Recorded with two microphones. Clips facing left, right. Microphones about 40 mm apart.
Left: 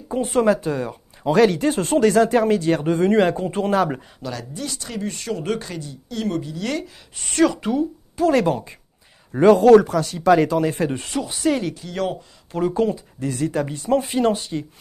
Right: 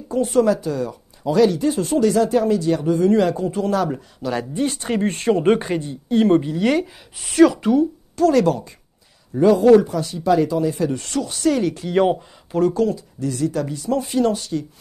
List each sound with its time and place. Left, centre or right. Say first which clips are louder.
0.1 s speech: right 1 dB; left
4.3 s speech: right 8 dB; right
6.6 s speech: right 7 dB; centre
7.2 s speech: right 5 dB; centre
8.2 s speech: right 2 dB; left
9.3 s speech: left 1 dB; left
11.0 s speech: right 2 dB; centre
11.8 s speech: right 8 dB; centre
12.7 s speech: right 1 dB; left